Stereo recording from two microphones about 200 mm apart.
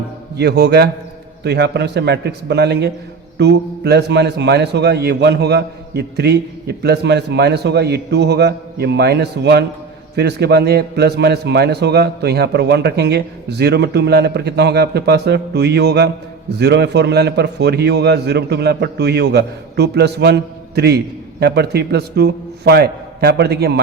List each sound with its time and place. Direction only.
0.3 s a man's voice: 55° right (ahead or behind)